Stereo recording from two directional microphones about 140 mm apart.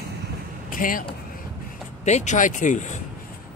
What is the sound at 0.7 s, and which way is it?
Speech, 80° left.